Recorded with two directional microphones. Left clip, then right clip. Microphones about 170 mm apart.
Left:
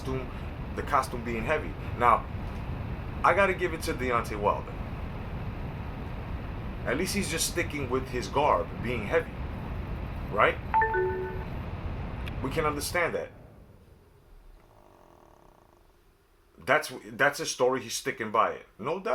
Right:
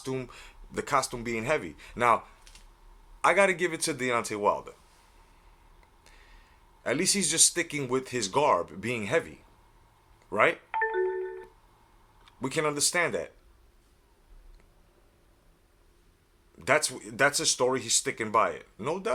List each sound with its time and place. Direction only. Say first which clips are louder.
0.8 s speech: even; 25° right (ahead or behind)
3.2 s speech: right 1 dB; 30° right (ahead or behind)
6.8 s speech: right 2 dB; 25° right (ahead or behind)
10.3 s speech: left 1 dB; 30° right (ahead or behind)
12.4 s speech: right 1 dB; 25° right (ahead or behind)
16.6 s speech: even; 25° right (ahead or behind)